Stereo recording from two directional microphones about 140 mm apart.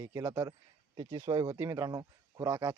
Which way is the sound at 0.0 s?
20° right (ahead or behind).